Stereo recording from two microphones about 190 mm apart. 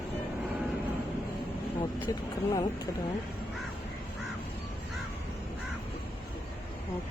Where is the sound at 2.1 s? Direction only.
15° left (ahead or behind).